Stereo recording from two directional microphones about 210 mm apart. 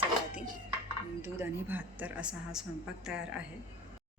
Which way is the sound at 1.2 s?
10° right (ahead or behind).